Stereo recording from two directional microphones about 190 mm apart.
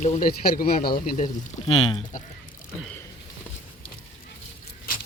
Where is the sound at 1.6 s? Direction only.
30° left (ahead or behind).